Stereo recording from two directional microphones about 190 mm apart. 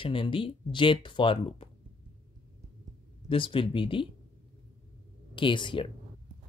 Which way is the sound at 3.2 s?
25° left (ahead or behind).